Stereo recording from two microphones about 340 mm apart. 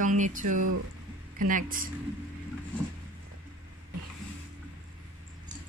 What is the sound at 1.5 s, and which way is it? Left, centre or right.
Speech, right.